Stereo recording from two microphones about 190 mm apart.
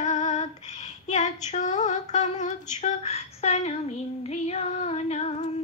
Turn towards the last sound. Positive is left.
turn(degrees=35)  # may be behind; listen again after turning